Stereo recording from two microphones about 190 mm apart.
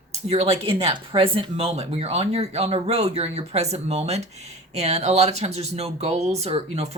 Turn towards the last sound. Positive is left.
turn(degrees=-35)  # may be behind; listen again after turning